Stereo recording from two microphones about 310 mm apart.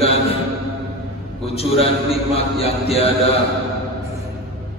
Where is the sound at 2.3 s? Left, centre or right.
Centre.